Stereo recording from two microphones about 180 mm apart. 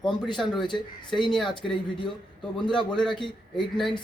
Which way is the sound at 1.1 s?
Centre (ahead or behind).